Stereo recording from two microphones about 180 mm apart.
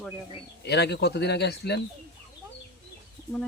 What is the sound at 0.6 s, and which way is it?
Speech, 65° left (ahead or behind).